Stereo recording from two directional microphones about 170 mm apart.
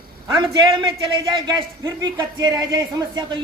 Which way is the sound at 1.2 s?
25° right (ahead or behind).